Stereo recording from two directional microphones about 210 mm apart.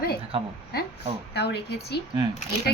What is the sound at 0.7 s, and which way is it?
A woman's voice, 50° left (ahead or behind).